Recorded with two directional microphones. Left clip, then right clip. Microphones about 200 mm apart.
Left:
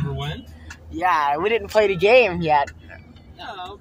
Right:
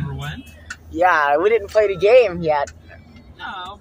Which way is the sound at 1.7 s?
25° left (ahead or behind).